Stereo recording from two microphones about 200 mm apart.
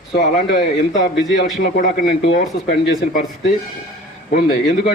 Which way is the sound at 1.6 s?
45° left (ahead or behind).